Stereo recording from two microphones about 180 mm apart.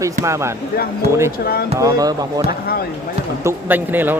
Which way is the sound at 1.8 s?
20° right (ahead or behind).